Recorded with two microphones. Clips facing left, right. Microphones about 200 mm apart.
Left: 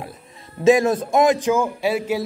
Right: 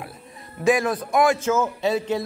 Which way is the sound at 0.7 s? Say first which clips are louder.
Left 5 dB; 25° left (ahead or behind).